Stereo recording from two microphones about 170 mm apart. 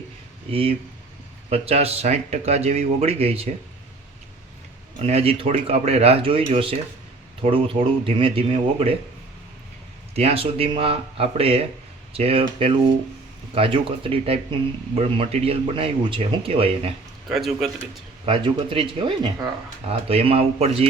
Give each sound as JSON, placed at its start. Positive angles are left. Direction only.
{"t": 0.5, "sound": "speech", "side_deg": -35}
{"t": 4.9, "sound": "speech", "side_deg": -35}
{"t": 10.2, "sound": "speech", "side_deg": -35}
{"t": 17.2, "sound": "a man's voice", "side_deg": 0}
{"t": 18.3, "sound": "speech", "side_deg": -30}